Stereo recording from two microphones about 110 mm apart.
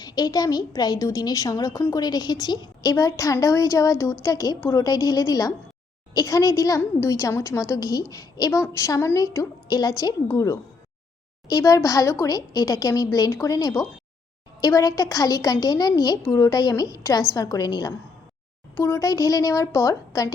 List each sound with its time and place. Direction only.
0.0 s a woman's voice: 35° left (ahead or behind)
18.7 s a woman's voice: 25° left (ahead or behind)